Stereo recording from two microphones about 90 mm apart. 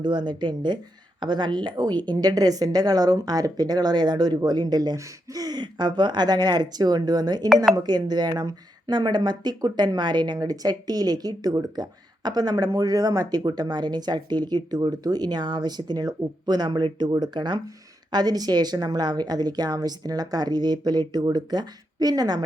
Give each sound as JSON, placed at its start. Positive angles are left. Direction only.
{"t": 0.0, "sound": "speech", "side_deg": -55}